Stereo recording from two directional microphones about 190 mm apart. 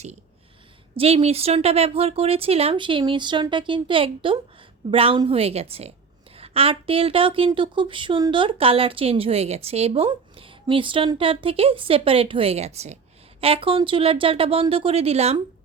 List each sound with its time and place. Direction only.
0.9 s speech: 30° right (ahead or behind)